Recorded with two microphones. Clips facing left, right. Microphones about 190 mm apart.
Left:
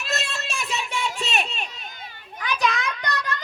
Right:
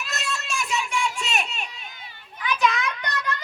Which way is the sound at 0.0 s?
30° left (ahead or behind).